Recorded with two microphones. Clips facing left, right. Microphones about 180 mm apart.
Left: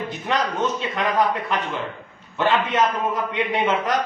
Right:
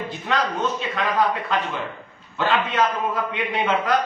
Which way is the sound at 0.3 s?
25° left (ahead or behind).